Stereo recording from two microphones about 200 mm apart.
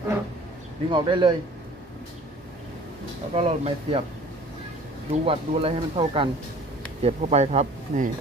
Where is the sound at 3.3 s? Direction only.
30° right (ahead or behind).